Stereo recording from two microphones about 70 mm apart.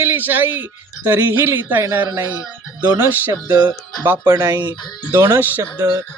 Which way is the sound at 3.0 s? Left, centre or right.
Right.